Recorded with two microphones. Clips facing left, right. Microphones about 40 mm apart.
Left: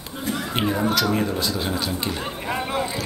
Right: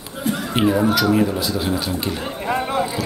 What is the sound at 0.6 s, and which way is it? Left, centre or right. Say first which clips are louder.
Speech: right 5 dB; centre.